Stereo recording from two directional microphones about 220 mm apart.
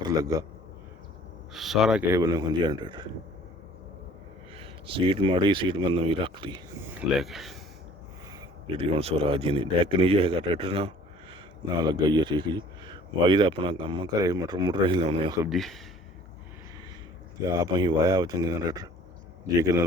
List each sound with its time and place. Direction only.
0.0 s a man's voice: 15° right (ahead or behind)
1.5 s speech: centre (ahead or behind); by 3.1 s 20° right (ahead or behind)
4.6 s speech: 25° right (ahead or behind)
7.2 s speech: centre (ahead or behind)
8.6 s speech: 25° right (ahead or behind)
15.4 s speech: centre (ahead or behind)
17.6 s speech: 20° right (ahead or behind)